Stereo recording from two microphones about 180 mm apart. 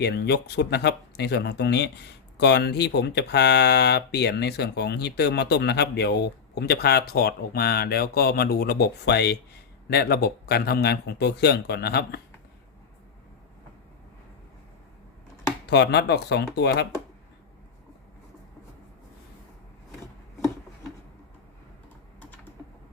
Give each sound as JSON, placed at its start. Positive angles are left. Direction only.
{"t": 0.0, "sound": "speech", "side_deg": 70}
{"t": 15.6, "sound": "speech", "side_deg": 70}